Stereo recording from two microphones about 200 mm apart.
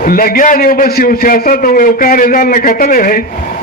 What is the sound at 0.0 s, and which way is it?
A man's voice, 45° left (ahead or behind).